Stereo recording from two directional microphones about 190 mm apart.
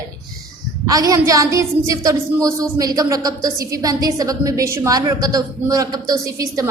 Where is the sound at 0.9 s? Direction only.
20° right (ahead or behind).